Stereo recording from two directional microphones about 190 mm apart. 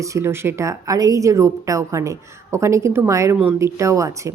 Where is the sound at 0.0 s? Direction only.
15° right (ahead or behind).